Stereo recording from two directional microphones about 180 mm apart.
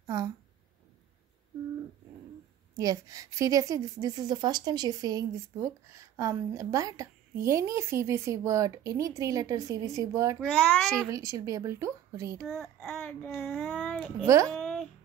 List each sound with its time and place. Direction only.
0.0 s a woman's voice: 20° right (ahead or behind)
2.8 s a woman's voice: 20° right (ahead or behind)
10.4 s child singing: centre (ahead or behind)
11.0 s speech: 20° right (ahead or behind)
12.4 s child singing: centre (ahead or behind)
14.2 s speech: 15° right (ahead or behind)
14.5 s a sound: centre (ahead or behind)